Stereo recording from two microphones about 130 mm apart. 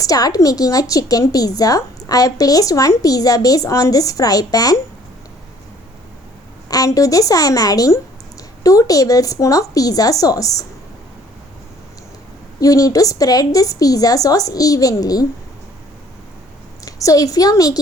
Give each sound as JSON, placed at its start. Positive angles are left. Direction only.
{"t": 0.0, "sound": "a woman's voice", "side_deg": 25}
{"t": 6.7, "sound": "a woman's voice", "side_deg": 25}
{"t": 12.5, "sound": "a woman's voice", "side_deg": 25}
{"t": 16.8, "sound": "a woman's voice", "side_deg": 25}